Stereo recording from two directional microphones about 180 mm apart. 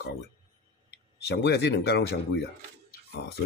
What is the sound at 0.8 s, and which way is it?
Speech, 70° left (ahead or behind).